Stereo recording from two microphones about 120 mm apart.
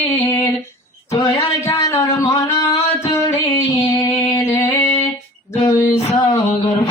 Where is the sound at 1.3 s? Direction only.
25° left (ahead or behind).